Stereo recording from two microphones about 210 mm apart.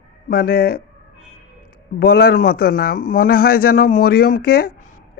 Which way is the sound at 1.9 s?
45° left (ahead or behind).